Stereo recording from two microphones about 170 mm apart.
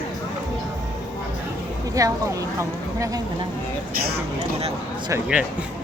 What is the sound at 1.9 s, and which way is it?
Speech, 20° right (ahead or behind).